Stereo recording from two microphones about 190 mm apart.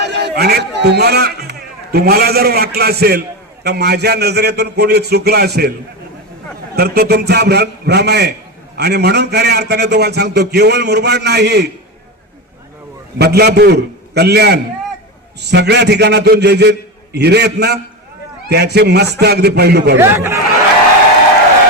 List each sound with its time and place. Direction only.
0.0 s speech: 60° right (ahead or behind)
6.7 s speech: 55° right (ahead or behind)
13.1 s speech: 60° right (ahead or behind)
20.0 s a man's voice: 15° right (ahead or behind)